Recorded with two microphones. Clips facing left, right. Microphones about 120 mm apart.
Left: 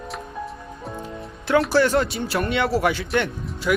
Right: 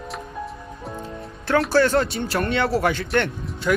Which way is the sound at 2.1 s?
Centre (ahead or behind).